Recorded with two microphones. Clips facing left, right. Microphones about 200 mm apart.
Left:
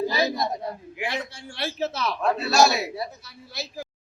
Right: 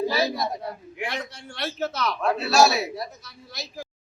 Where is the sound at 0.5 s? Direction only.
20° left (ahead or behind).